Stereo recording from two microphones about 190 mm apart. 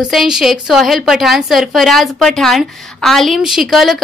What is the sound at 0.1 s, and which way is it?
A woman's voice, centre (ahead or behind).